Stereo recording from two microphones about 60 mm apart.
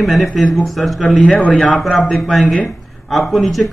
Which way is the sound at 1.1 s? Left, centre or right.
Left.